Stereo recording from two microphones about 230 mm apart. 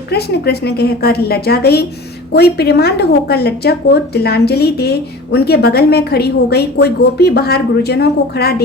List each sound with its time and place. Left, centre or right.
0.1 s a woman's voice: left